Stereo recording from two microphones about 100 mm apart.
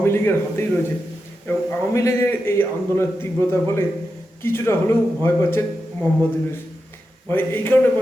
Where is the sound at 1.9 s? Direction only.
30° left (ahead or behind).